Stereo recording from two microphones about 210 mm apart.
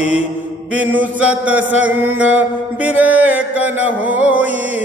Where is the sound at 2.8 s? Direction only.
10° right (ahead or behind).